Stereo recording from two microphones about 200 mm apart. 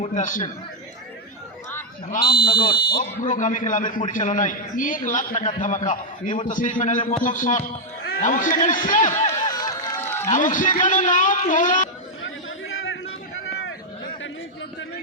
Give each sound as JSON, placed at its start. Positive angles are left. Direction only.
{"t": 0.0, "sound": "speech", "side_deg": 40}
{"t": 2.0, "sound": "speech", "side_deg": 45}
{"t": 2.4, "sound": "speech", "side_deg": 25}
{"t": 2.9, "sound": "a man's voice", "side_deg": 40}
{"t": 9.5, "sound": "run", "side_deg": 20}
{"t": 10.2, "sound": "a man's voice", "side_deg": 40}
{"t": 12.2, "sound": "chatter", "side_deg": 75}